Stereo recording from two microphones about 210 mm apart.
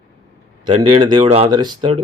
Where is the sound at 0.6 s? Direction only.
25° right (ahead or behind).